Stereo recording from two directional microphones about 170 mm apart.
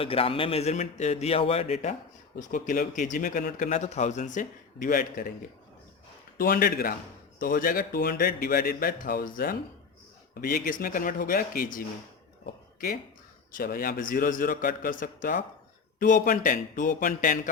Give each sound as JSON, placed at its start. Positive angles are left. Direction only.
{"t": 0.0, "sound": "a man's voice", "side_deg": 35}
{"t": 2.4, "sound": "speech", "side_deg": 50}
{"t": 6.3, "sound": "a man's voice", "side_deg": 60}
{"t": 13.5, "sound": "a man's voice", "side_deg": 55}